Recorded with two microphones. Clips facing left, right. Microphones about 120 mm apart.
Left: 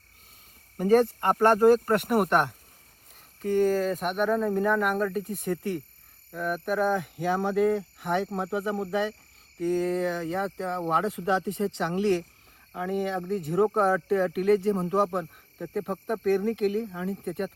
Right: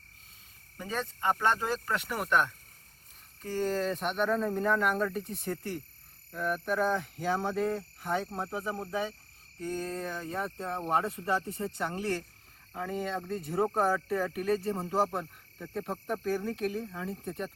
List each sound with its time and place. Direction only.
0.8 s speech: 55° left (ahead or behind)
3.4 s speech: 10° left (ahead or behind)
7.8 s speech: 70° left (ahead or behind)
8.3 s speech: 10° left (ahead or behind)
8.9 s speech: 75° left (ahead or behind)
12.7 s speech: 5° left (ahead or behind)
13.7 s speech: 60° left (ahead or behind)
15.7 s speech: centre (ahead or behind)
16.2 s speech: 60° left (ahead or behind)